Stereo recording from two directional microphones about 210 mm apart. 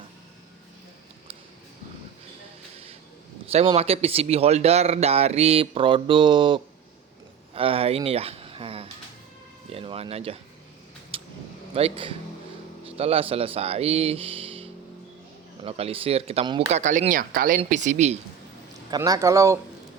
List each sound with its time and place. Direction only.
3.5 s speech: 30° right (ahead or behind)
11.1 s vehicle: 25° right (ahead or behind)
11.7 s speech: 30° right (ahead or behind)
18.9 s speech: 15° right (ahead or behind)